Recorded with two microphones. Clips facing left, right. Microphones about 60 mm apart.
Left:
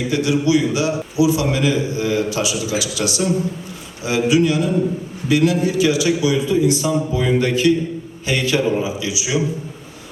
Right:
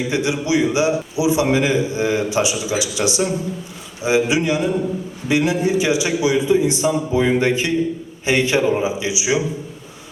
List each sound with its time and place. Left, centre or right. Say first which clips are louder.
0.1 s a man's voice: left 4 dB; right